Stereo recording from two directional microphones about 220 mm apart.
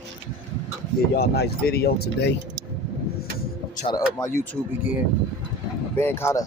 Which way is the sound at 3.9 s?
15° left (ahead or behind).